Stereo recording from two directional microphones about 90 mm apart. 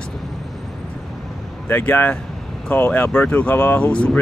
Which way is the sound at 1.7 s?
20° left (ahead or behind).